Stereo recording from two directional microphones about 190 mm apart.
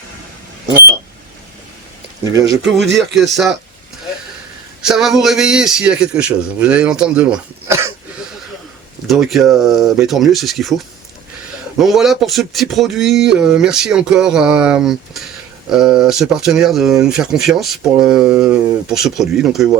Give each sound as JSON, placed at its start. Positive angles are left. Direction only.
{"t": 2.8, "sound": "speech", "side_deg": -65}
{"t": 3.3, "sound": "speech", "side_deg": 0}
{"t": 4.8, "sound": "speech", "side_deg": 0}
{"t": 9.0, "sound": "speech", "side_deg": 0}